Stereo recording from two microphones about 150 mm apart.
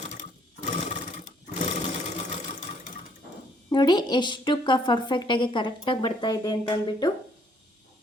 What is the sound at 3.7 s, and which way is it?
A woman's voice, 30° left (ahead or behind).